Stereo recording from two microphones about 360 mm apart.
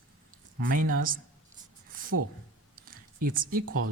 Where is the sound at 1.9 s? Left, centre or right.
Right.